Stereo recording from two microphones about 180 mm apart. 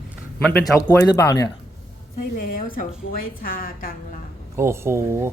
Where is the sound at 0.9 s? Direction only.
15° left (ahead or behind).